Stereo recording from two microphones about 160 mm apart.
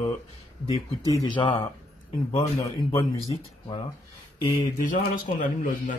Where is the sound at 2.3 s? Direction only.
20° left (ahead or behind).